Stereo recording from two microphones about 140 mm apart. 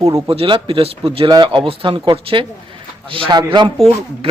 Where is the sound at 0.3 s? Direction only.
40° right (ahead or behind).